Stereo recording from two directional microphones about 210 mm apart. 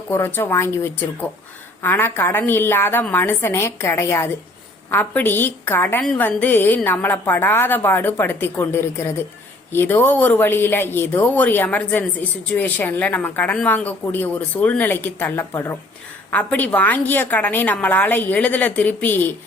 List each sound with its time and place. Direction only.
0.1 s speech: 10° left (ahead or behind)